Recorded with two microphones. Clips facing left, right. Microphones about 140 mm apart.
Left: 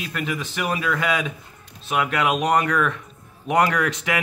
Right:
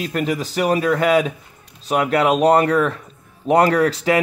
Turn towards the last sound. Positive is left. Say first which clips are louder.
# right 7 dB
turn(degrees=-35)  # may be behind; listen again after turning